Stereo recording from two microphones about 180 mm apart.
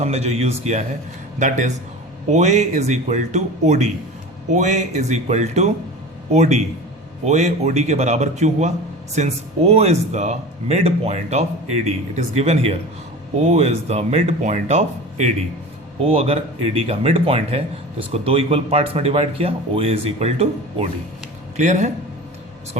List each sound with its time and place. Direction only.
0.0 s a man's voice: 35° right (ahead or behind)